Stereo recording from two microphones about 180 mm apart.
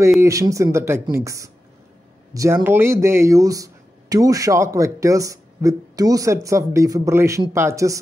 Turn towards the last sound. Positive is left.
turn(degrees=-15)  # may be behind; listen again after turning